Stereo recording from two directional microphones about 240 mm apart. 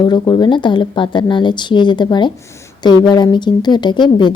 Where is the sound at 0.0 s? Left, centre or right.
Centre.